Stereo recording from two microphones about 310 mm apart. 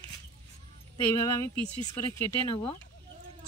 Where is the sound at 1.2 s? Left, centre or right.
Centre.